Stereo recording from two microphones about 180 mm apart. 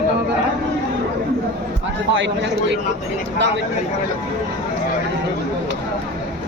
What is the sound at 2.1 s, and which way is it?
Speech, 85° right.